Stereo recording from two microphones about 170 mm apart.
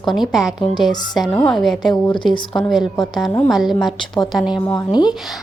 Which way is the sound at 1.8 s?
30° left (ahead or behind).